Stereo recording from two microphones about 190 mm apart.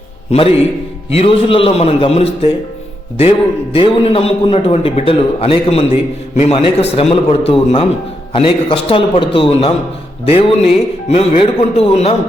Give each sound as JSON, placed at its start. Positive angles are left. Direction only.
{"t": 0.3, "sound": "a man's voice", "side_deg": 30}